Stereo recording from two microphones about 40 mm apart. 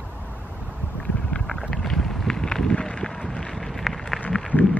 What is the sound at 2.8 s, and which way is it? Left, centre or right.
Run, left.